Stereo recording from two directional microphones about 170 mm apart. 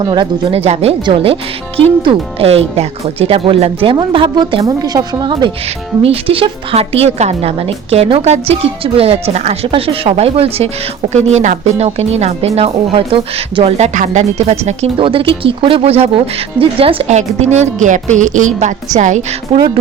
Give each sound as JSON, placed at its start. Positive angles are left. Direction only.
{"t": 0.0, "sound": "a woman's voice", "side_deg": -30}
{"t": 6.0, "sound": "speech", "side_deg": -35}
{"t": 19.5, "sound": "a woman's voice", "side_deg": -25}